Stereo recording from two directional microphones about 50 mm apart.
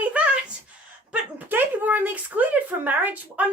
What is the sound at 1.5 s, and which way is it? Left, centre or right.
Speech, right.